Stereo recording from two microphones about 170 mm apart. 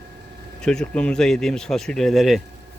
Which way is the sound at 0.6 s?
5° left (ahead or behind).